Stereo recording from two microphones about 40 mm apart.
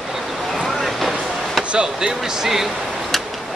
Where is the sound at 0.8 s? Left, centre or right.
Centre.